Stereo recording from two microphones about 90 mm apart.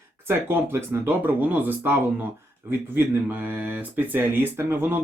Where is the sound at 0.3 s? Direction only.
25° right (ahead or behind).